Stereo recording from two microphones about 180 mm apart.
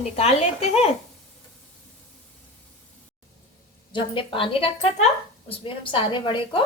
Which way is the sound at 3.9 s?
30° left (ahead or behind).